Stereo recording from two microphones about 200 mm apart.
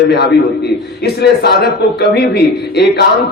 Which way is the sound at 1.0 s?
55° left (ahead or behind).